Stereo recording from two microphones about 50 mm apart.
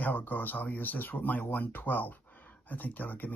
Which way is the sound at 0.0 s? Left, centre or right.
Left.